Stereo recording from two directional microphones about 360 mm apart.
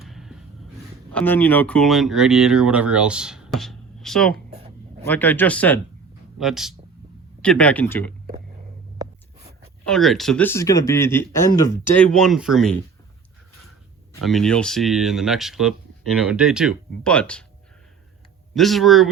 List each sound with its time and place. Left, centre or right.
0.0 s a sound: centre
1.1 s speech: centre
4.5 s a sound: centre
5.0 s speech: centre
9.8 s speech: centre
14.1 s speech: centre
18.5 s speech: centre